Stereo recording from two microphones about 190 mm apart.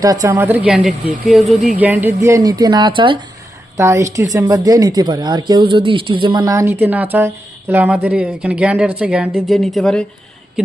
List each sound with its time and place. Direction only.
0.0 s a woman's voice: 20° right (ahead or behind)
3.8 s a woman's voice: 15° right (ahead or behind); by 10.0 s centre (ahead or behind)